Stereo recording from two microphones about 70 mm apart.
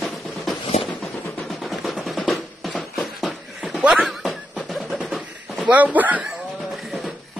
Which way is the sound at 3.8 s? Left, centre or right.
Centre.